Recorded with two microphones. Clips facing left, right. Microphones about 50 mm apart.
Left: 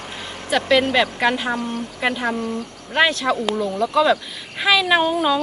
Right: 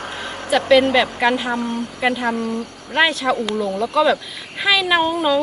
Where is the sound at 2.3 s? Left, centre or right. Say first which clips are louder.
Right 2 dB; right.